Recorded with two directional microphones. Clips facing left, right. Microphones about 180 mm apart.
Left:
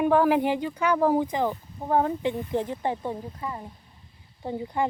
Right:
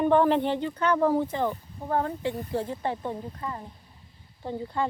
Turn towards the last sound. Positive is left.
turn(degrees=15)  # may be behind; listen again after turning